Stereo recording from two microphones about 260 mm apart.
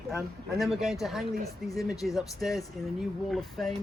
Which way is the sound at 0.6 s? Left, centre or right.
Centre.